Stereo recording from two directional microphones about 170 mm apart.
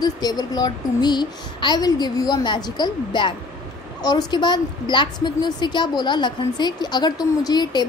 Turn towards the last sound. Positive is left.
turn(degrees=25)  # may be behind; listen again after turning